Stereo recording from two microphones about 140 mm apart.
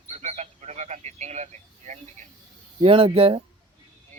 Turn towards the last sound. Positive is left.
turn(degrees=-45)  # may be behind; listen again after turning